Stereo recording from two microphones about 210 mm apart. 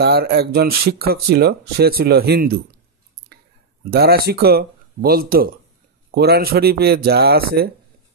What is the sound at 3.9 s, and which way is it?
Speech, 50° right (ahead or behind).